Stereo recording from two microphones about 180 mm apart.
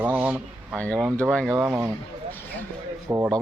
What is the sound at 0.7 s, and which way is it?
Speech, 5° left (ahead or behind).